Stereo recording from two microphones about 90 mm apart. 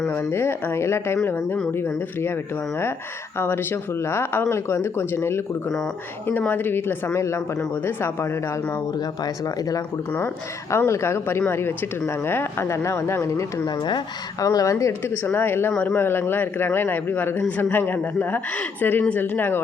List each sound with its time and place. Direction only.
0.1 s speech: 25° left (ahead or behind)
3.3 s speech: 25° left (ahead or behind)
6.5 s speech: 25° left (ahead or behind)
9.2 s speech: 45° left (ahead or behind)
10.7 s speech: 35° left (ahead or behind)
13.7 s speech: 55° left (ahead or behind)
14.4 s speech: 40° left (ahead or behind)
15.0 s speech: 20° left (ahead or behind)